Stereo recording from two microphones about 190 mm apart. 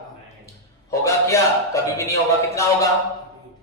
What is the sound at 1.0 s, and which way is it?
Speech, 15° left (ahead or behind).